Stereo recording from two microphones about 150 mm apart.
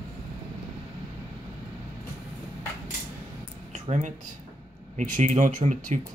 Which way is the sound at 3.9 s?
40° right (ahead or behind).